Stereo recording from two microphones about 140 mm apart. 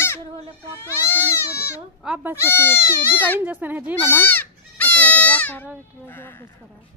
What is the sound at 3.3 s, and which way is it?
Speech, 10° right (ahead or behind).